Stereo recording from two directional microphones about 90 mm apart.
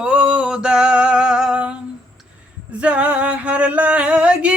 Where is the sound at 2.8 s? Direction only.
15° right (ahead or behind).